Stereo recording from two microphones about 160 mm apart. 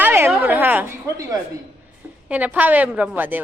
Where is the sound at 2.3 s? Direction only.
10° right (ahead or behind).